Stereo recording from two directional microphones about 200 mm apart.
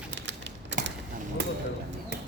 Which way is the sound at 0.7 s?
65° right (ahead or behind).